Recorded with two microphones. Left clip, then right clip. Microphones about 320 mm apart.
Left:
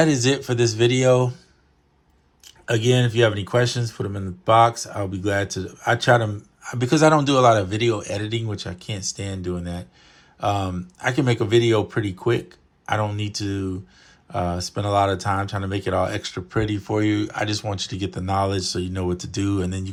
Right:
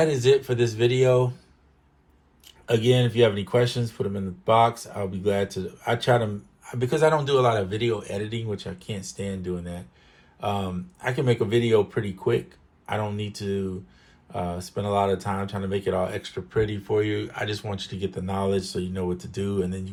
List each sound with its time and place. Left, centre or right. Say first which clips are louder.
0.0 s speech: even; left
2.6 s speech: left 1 dB; left